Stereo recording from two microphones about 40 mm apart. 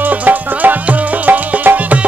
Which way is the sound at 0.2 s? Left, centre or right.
Right.